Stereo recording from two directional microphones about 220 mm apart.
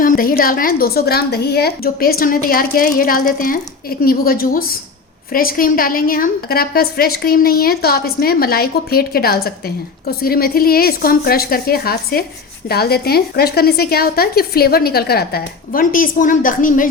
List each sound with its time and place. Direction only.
0.0 s a woman's voice: 40° left (ahead or behind)